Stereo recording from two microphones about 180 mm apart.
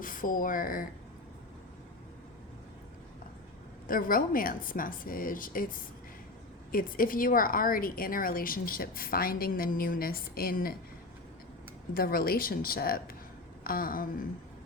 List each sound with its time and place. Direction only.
0.0 s speech: 50° left (ahead or behind)
3.8 s a woman's voice: 50° left (ahead or behind)
11.9 s a woman's voice: 55° left (ahead or behind)